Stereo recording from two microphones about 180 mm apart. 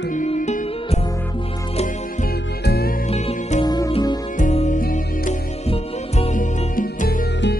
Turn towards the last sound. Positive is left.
turn(degrees=60)  # may be behind; listen again after turning